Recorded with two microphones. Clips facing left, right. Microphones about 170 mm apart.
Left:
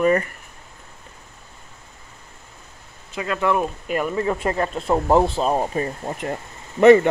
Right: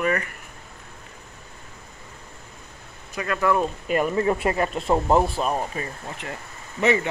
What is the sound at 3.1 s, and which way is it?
Speech, 20° left (ahead or behind).